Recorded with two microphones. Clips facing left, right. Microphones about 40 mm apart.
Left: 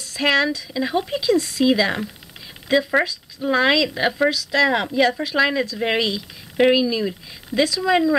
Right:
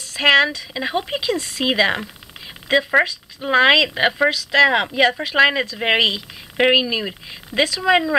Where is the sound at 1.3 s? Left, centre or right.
Centre.